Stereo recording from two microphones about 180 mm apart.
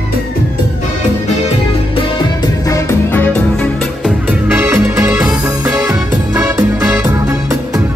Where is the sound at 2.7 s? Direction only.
15° left (ahead or behind).